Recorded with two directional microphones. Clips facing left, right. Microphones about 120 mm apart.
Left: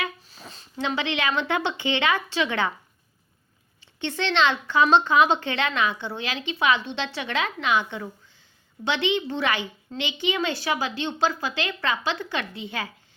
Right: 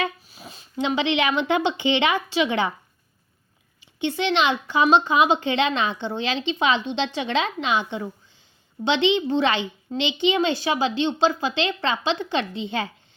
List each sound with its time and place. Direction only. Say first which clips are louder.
0.3 s speech: right 2 dB; 15° right (ahead or behind)
4.0 s a woman's voice: right 2 dB; 15° right (ahead or behind)